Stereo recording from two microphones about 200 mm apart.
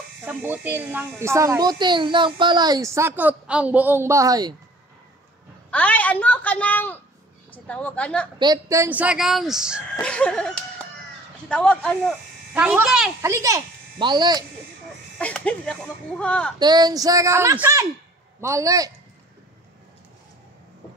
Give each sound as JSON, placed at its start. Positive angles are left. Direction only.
{"t": 0.2, "sound": "a child's voice", "side_deg": -10}
{"t": 5.7, "sound": "a woman's voice", "side_deg": 5}
{"t": 8.4, "sound": "a woman's voice", "side_deg": -20}
{"t": 10.0, "sound": "music", "side_deg": 5}
{"t": 11.4, "sound": "speech", "side_deg": 5}
{"t": 13.2, "sound": "speech", "side_deg": -15}
{"t": 15.1, "sound": "a woman's voice", "side_deg": 5}
{"t": 16.5, "sound": "a child's voice", "side_deg": -20}